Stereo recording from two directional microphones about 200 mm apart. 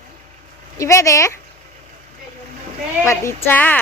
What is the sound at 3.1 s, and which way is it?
Speech, 15° left (ahead or behind).